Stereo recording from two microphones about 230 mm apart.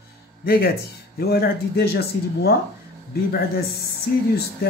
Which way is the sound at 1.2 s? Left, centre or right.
Left.